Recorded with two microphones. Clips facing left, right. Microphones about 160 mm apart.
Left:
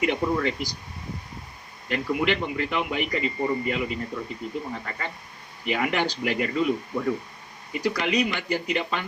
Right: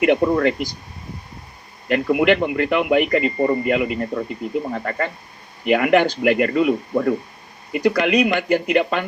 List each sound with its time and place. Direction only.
0.0 s speech: 60° right (ahead or behind)
1.9 s speech: 60° right (ahead or behind)